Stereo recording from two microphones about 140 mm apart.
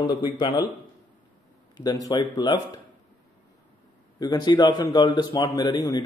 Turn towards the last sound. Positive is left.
turn(degrees=30)  # may be behind; listen again after turning